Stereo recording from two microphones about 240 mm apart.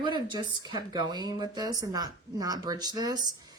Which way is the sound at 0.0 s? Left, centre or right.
Centre.